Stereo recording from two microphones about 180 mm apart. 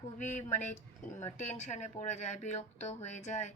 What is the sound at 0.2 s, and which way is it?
Speech, 40° left (ahead or behind).